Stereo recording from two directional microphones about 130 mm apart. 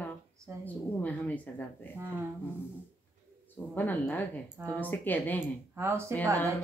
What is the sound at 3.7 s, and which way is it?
Speech, 15° left (ahead or behind).